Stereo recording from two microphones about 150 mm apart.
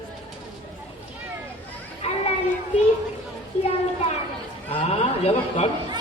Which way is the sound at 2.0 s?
45° left (ahead or behind).